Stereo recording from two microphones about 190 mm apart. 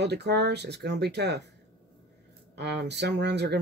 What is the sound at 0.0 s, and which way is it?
Speech, 60° right (ahead or behind).